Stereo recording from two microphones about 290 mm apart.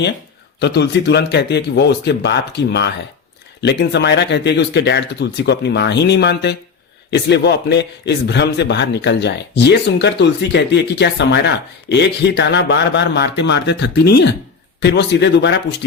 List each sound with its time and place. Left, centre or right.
0.6 s a man's voice: left